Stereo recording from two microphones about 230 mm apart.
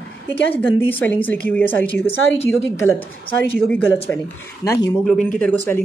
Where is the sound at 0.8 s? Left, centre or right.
Centre.